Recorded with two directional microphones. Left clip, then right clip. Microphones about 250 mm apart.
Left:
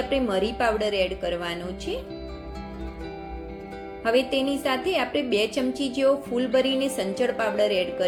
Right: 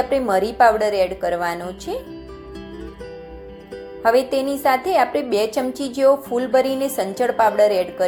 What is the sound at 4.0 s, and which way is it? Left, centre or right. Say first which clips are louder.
A woman's voice: right 6 dB; centre.